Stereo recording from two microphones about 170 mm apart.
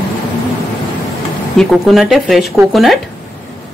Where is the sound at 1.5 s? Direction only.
Centre (ahead or behind).